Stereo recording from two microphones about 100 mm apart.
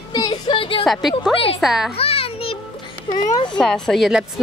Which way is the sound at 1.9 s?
75° left (ahead or behind).